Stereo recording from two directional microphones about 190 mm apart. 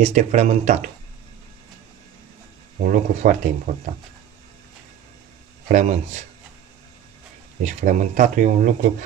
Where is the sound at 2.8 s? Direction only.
45° right (ahead or behind).